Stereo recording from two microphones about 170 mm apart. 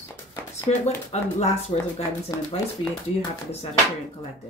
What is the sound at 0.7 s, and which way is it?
Speech, 40° left (ahead or behind).